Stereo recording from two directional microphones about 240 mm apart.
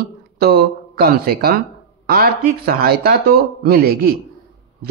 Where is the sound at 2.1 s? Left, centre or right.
Right.